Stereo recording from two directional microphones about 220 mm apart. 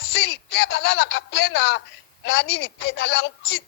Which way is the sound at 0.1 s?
50° left (ahead or behind).